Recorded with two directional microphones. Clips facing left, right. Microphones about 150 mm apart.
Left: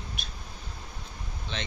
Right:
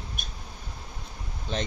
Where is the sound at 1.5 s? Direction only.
40° right (ahead or behind).